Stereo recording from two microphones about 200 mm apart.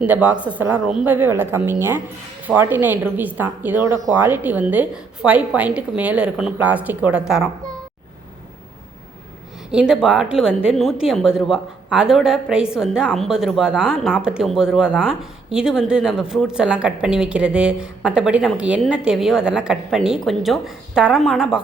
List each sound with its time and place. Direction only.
0.0 s a woman's voice: 5° right (ahead or behind)
9.7 s a woman's voice: 5° right (ahead or behind)